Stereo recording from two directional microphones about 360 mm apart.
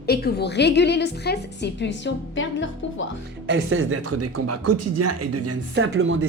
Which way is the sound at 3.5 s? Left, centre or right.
Right.